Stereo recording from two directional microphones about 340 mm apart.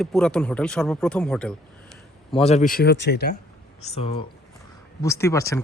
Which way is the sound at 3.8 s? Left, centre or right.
Centre.